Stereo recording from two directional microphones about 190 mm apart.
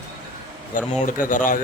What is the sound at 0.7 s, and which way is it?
Speech, 45° left (ahead or behind).